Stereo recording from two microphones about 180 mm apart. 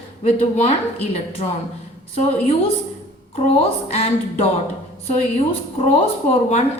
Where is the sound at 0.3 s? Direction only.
35° left (ahead or behind).